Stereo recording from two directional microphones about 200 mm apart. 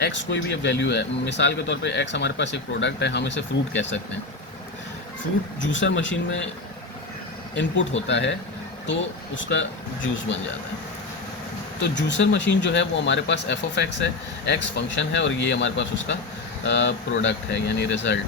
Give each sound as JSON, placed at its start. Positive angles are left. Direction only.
{"t": 0.0, "sound": "speech", "side_deg": 65}
{"t": 5.5, "sound": "speech", "side_deg": 65}
{"t": 7.5, "sound": "speech", "side_deg": 65}
{"t": 11.8, "sound": "speech", "side_deg": 65}